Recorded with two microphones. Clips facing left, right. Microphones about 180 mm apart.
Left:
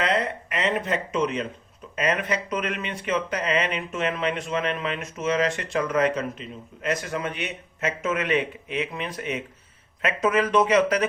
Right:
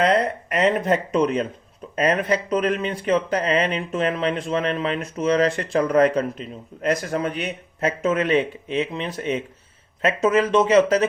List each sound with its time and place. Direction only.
0.0 s speech: 40° right (ahead or behind)